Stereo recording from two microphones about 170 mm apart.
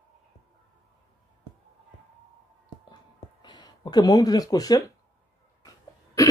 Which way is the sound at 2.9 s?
25° left (ahead or behind).